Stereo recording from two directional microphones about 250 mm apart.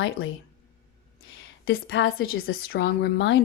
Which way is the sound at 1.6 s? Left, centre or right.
Left.